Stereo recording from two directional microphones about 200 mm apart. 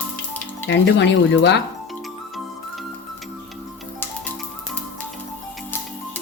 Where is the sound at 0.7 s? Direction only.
60° left (ahead or behind).